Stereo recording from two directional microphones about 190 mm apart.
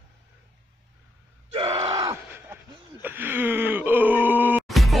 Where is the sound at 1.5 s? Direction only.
30° right (ahead or behind).